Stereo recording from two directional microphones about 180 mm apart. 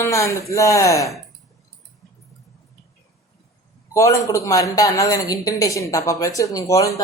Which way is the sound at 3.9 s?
15° left (ahead or behind).